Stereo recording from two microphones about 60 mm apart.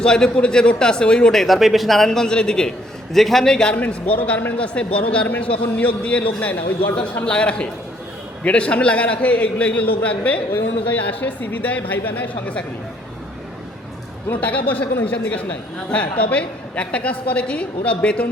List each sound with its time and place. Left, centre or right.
0.0 s speech: centre
3.8 s a man's voice: left
4.5 s a man's voice: left
14.3 s a man's voice: left